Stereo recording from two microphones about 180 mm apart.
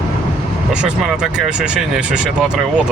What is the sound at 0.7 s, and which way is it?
Speech, 5° right (ahead or behind).